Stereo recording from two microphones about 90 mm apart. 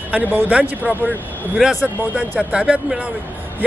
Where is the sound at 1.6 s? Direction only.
5° left (ahead or behind).